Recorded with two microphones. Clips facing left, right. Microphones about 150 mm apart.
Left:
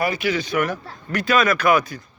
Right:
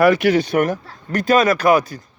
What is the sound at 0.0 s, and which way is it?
Speech, 75° right (ahead or behind).